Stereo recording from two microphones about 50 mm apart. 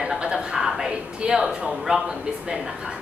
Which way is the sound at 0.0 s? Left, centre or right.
Centre.